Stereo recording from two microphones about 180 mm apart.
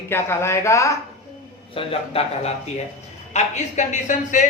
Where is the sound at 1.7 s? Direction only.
30° left (ahead or behind).